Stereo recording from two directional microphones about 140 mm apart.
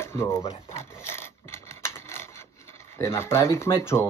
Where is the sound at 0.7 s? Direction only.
15° left (ahead or behind).